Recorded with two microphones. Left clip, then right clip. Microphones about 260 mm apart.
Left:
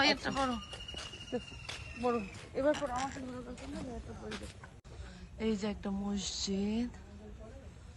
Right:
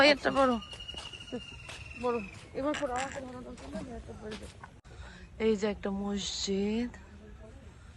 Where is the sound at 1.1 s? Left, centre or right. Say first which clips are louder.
Left 2 dB; centre.